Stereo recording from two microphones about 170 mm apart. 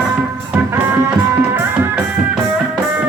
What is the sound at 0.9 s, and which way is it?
Music, 15° right (ahead or behind).